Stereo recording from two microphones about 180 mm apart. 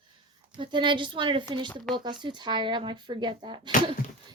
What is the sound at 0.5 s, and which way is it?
A woman's voice, 25° right (ahead or behind).